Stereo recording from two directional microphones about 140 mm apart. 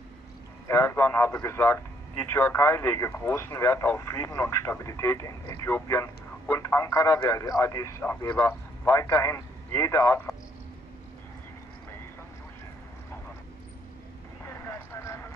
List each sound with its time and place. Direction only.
0.7 s a man's voice: 15° left (ahead or behind)
14.4 s vehicle: 20° left (ahead or behind)